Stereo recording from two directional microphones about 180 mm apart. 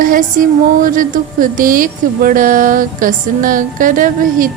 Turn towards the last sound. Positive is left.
turn(degrees=-50)  # may be behind; listen again after turning